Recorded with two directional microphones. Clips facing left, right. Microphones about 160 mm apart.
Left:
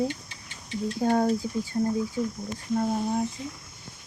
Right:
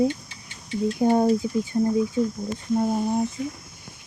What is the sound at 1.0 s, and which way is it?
Speech, 15° right (ahead or behind).